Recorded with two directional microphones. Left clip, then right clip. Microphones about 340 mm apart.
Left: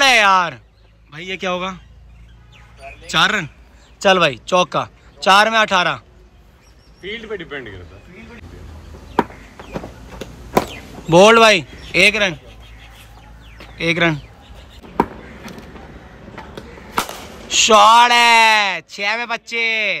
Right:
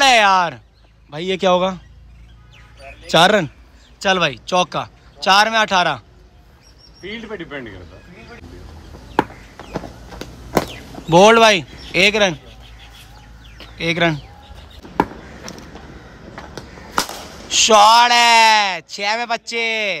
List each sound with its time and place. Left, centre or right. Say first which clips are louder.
0.0 s a sound: even; centre
1.1 s speech: right 7 dB; centre
3.1 s speech: right 3 dB; centre
7.0 s speech: left 2 dB; right
11.1 s speech: left 1 dB; centre
13.7 s speech: left 1 dB; centre
17.5 s speech: even; centre